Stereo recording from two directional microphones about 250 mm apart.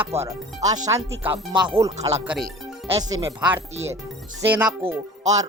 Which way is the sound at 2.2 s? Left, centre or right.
Centre.